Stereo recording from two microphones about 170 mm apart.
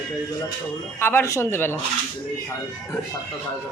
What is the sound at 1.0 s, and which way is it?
Speech, 15° left (ahead or behind).